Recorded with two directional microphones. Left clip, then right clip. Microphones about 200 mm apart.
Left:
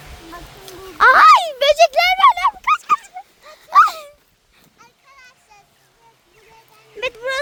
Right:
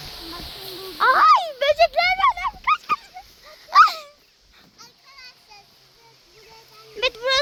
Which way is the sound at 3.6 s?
20° left (ahead or behind).